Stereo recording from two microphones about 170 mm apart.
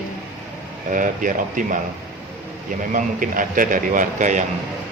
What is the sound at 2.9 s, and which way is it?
Speech, 50° right (ahead or behind).